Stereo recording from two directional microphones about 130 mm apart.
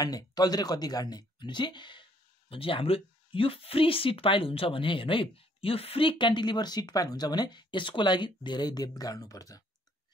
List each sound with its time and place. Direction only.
0.0 s speech: 30° left (ahead or behind)